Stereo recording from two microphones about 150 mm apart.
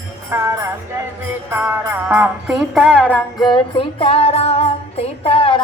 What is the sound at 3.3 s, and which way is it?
Music, 30° left (ahead or behind).